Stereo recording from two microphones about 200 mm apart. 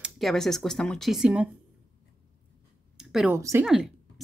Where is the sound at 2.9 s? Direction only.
Centre (ahead or behind).